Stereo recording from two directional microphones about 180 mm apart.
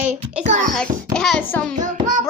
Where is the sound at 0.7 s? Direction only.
5° left (ahead or behind).